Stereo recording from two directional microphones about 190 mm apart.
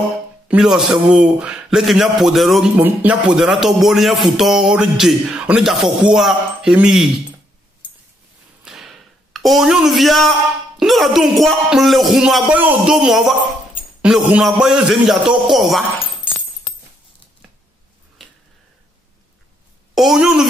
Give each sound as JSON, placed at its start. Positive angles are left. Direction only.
{"t": 0.5, "sound": "speech", "side_deg": -5}
{"t": 8.6, "sound": "a sound", "side_deg": 0}
{"t": 10.8, "sound": "speech", "side_deg": 0}
{"t": 19.9, "sound": "a woman's voice", "side_deg": 0}